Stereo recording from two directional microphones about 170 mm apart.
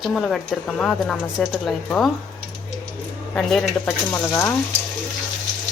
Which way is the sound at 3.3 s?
5° left (ahead or behind).